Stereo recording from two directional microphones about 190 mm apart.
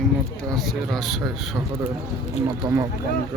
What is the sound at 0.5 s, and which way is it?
Speech, centre (ahead or behind).